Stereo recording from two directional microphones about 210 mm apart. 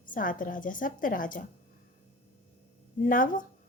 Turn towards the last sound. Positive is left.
turn(degrees=40)  # may be behind; listen again after turning